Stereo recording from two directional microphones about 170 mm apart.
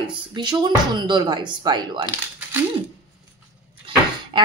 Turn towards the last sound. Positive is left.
turn(degrees=-30)  # may be behind; listen again after turning